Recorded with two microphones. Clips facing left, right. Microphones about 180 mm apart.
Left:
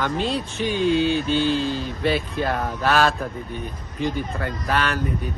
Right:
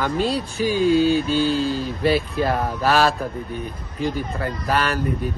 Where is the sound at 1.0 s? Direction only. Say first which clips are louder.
Right 2 dB; 35° right (ahead or behind).